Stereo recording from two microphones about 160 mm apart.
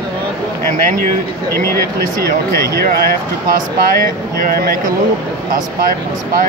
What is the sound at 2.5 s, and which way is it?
Speech, 75° right (ahead or behind).